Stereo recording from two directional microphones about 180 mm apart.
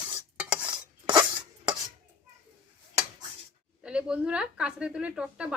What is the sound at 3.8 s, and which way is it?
A woman's voice, 5° right (ahead or behind).